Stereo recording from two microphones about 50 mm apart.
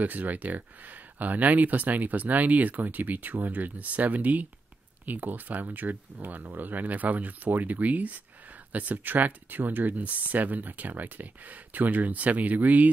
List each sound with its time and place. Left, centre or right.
0.0 s speech: right